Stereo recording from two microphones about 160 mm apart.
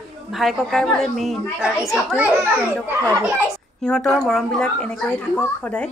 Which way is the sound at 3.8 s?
5° left (ahead or behind).